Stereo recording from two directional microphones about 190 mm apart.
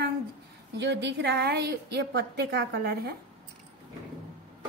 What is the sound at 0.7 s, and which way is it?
A woman's voice, 65° right (ahead or behind).